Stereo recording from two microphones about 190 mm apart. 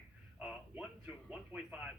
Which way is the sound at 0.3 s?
5° right (ahead or behind).